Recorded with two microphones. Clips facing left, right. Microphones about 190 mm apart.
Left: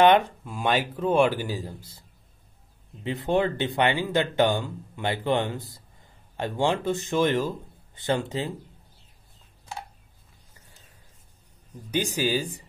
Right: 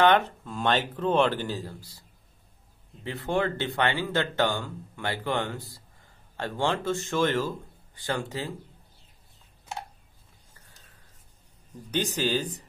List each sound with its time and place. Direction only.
0.0 s speech: 15° left (ahead or behind)
11.9 s speech: 10° left (ahead or behind)